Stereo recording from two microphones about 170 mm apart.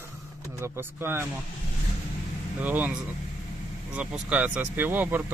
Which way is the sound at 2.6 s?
10° right (ahead or behind).